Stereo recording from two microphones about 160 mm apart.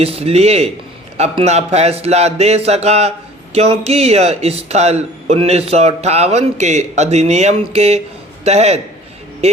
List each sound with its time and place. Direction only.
0.0 s a man's voice: 40° right (ahead or behind)